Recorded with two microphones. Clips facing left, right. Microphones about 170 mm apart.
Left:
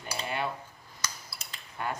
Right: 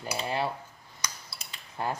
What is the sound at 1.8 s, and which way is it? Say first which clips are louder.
Speech: right 3 dB; 35° right (ahead or behind).